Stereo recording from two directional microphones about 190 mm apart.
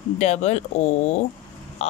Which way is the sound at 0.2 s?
35° left (ahead or behind).